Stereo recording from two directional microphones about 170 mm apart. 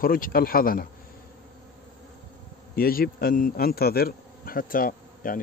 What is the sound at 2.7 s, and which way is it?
Speech, 60° left (ahead or behind).